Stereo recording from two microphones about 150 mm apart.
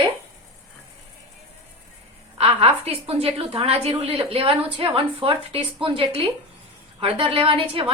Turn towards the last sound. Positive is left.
turn(degrees=-40)  # may be behind; listen again after turning